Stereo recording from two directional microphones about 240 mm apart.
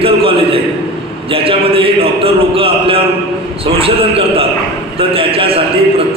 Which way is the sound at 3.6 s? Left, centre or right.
Right.